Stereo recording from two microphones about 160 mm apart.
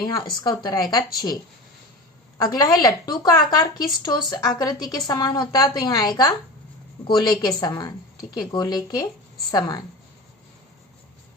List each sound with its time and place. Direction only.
0.0 s a woman's voice: 25° left (ahead or behind)
2.4 s a woman's voice: 25° left (ahead or behind)